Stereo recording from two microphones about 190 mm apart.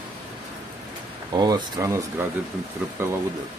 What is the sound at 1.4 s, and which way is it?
Speech, 20° right (ahead or behind).